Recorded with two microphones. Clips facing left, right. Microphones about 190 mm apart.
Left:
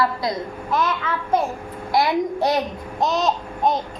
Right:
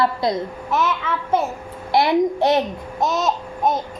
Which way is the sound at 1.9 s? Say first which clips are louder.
Right 3 dB; 25° right (ahead or behind).